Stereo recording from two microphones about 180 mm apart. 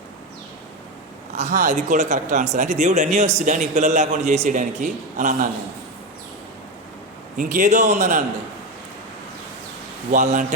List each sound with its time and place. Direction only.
1.6 s a man's voice: 40° right (ahead or behind)
7.3 s speech: 45° right (ahead or behind)
10.1 s a man's voice: 45° right (ahead or behind)